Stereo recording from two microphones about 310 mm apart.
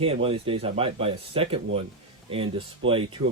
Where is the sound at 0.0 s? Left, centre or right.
Centre.